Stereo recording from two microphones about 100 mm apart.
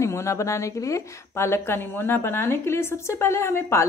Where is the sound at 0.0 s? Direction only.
30° left (ahead or behind).